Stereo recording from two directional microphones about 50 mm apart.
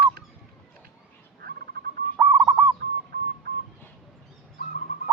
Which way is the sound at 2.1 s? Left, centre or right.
Right.